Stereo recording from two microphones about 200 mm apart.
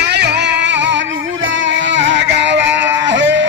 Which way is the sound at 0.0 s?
55° right (ahead or behind).